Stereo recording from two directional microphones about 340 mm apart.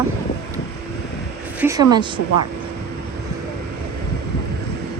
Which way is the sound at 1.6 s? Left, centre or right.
Centre.